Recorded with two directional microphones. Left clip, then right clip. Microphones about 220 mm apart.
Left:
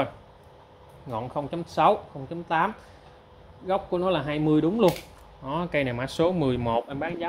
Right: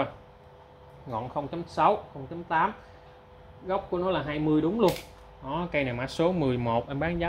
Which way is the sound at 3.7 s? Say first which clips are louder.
Left 3 dB; 40° left (ahead or behind).